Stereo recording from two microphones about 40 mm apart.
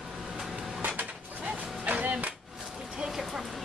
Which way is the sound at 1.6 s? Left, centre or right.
Right.